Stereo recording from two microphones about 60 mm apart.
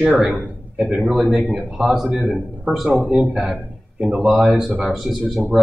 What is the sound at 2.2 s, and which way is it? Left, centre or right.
Speech, centre.